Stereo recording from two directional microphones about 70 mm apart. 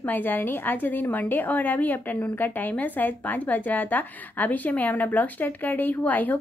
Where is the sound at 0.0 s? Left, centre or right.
Left.